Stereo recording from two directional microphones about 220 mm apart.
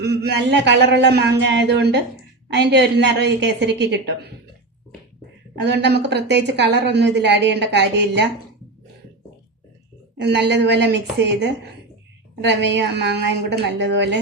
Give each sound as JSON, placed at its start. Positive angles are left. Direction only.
{"t": 0.0, "sound": "a woman's voice", "side_deg": -50}
{"t": 5.5, "sound": "a woman's voice", "side_deg": -50}
{"t": 10.2, "sound": "a woman's voice", "side_deg": -50}